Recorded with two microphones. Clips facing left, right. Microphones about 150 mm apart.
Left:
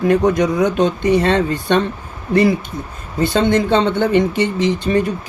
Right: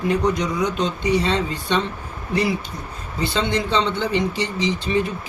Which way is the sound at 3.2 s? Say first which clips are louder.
Left 7 dB; 50° left (ahead or behind).